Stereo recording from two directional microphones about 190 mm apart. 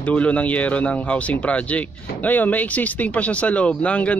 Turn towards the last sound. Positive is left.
turn(degrees=5)  # may be behind; listen again after turning